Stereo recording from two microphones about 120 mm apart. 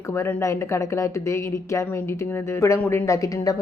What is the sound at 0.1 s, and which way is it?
Speech, 20° left (ahead or behind).